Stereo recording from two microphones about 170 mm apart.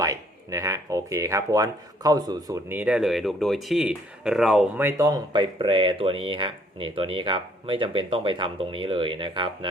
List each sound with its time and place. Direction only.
0.0 s speech: 20° right (ahead or behind)
2.6 s speech: 10° right (ahead or behind)
4.8 s speech: 15° right (ahead or behind)